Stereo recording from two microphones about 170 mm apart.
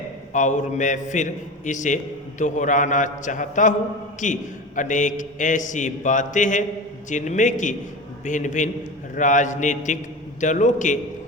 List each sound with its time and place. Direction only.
0.3 s a man's voice: 45° left (ahead or behind)